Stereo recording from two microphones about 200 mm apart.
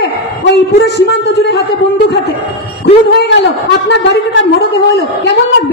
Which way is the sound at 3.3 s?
60° left (ahead or behind).